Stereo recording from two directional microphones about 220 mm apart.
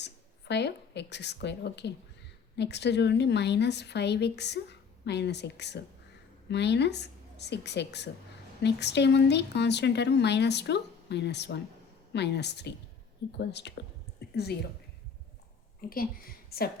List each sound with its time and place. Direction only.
0.0 s a woman's voice: 50° left (ahead or behind)
15.8 s a woman's voice: 40° left (ahead or behind)